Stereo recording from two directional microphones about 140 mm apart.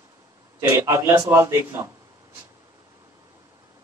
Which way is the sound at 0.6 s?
20° right (ahead or behind).